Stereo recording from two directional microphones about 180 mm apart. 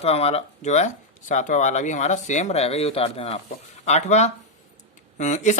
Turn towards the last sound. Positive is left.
turn(degrees=40)  # may be behind; listen again after turning